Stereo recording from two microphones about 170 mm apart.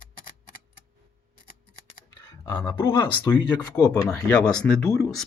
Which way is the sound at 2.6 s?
20° left (ahead or behind).